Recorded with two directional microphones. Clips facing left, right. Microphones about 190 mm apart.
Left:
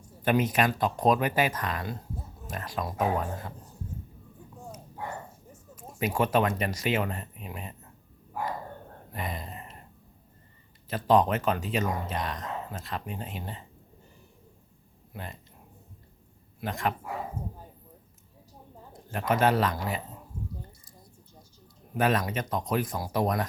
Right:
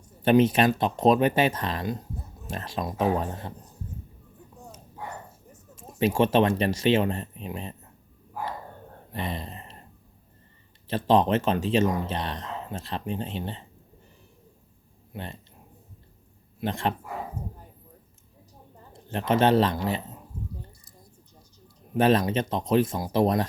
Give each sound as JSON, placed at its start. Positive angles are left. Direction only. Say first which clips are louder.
{"t": 0.2, "sound": "speech", "louder": "right 6 dB", "side_deg": -30}
{"t": 5.7, "sound": "speech", "louder": "right 5 dB", "side_deg": -25}
{"t": 9.1, "sound": "speech", "louder": "right 3 dB", "side_deg": -30}
{"t": 10.8, "sound": "speech", "louder": "right 2 dB", "side_deg": -25}
{"t": 15.1, "sound": "speech", "louder": "right 3 dB", "side_deg": -30}
{"t": 16.6, "sound": "speech", "louder": "right 3 dB", "side_deg": -30}
{"t": 19.0, "sound": "speech", "louder": "right 3 dB", "side_deg": -25}
{"t": 21.9, "sound": "speech", "louder": "right 5 dB", "side_deg": -30}